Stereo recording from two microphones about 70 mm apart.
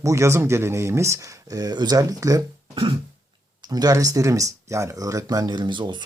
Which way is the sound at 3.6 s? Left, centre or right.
Right.